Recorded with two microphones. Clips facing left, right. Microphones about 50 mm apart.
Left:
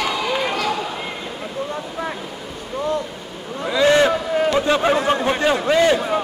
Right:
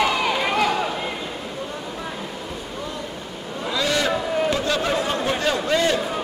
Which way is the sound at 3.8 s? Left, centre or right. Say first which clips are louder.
Left 8 dB; left.